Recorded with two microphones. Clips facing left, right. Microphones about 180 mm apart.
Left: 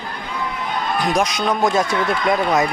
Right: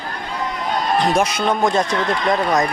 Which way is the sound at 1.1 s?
5° right (ahead or behind).